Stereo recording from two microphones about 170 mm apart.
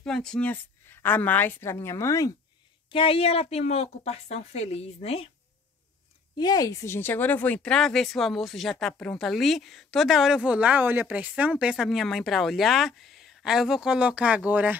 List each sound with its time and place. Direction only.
0.0 s speech: 5° left (ahead or behind); by 2.3 s 20° left (ahead or behind)
2.9 s a woman's voice: 30° left (ahead or behind)
6.3 s speech: 25° left (ahead or behind); by 14.8 s 10° right (ahead or behind)